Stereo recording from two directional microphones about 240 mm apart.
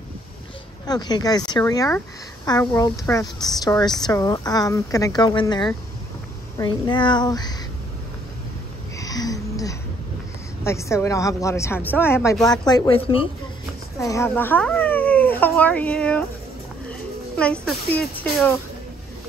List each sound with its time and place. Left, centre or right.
0.8 s speech: centre
8.9 s a sound: centre
10.6 s speech: centre
13.9 s speech: centre
17.4 s speech: centre